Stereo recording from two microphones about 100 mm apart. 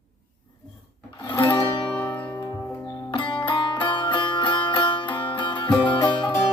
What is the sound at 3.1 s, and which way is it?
Music, 55° left (ahead or behind).